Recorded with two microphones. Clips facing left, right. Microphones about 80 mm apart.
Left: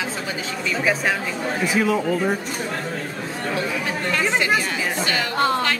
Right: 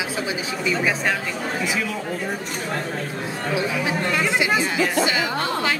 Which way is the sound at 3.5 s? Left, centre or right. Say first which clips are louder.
Right 2 dB; centre.